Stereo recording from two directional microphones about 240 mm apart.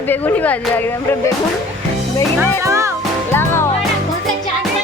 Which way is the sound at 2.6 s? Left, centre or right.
Centre.